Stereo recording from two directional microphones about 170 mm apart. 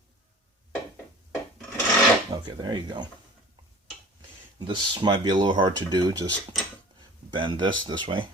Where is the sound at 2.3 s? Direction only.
25° right (ahead or behind).